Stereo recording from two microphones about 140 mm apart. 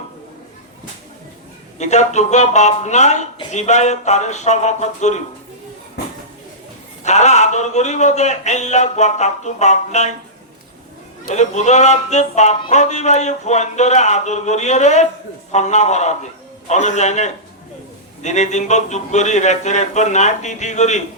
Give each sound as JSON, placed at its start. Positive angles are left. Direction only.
{"t": 1.8, "sound": "speech", "side_deg": 55}
{"t": 7.0, "sound": "speech", "side_deg": 55}
{"t": 11.3, "sound": "speech", "side_deg": 55}